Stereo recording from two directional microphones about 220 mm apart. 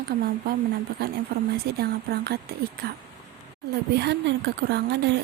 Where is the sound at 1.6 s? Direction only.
45° right (ahead or behind).